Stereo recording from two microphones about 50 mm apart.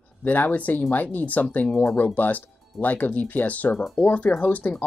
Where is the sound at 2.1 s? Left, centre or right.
Left.